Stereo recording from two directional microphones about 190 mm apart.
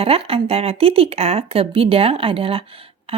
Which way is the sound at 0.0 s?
30° right (ahead or behind).